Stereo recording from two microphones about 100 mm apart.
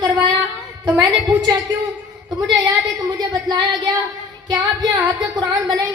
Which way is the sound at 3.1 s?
45° right (ahead or behind).